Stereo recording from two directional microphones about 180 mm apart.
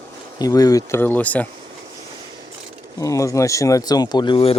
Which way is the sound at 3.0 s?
20° left (ahead or behind).